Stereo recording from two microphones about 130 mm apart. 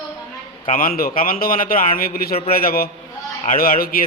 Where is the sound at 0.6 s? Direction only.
90° left.